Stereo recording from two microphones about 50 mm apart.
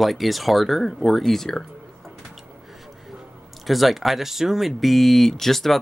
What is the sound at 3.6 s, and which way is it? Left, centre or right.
Speech, centre.